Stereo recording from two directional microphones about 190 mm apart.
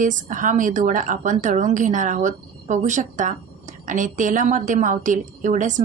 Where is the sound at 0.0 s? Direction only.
40° right (ahead or behind).